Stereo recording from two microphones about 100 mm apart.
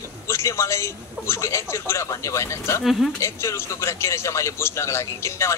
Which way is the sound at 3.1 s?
30° left (ahead or behind).